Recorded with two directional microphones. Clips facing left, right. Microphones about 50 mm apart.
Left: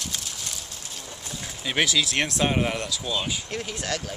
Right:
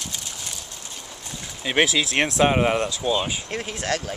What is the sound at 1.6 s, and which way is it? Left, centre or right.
Speech, centre.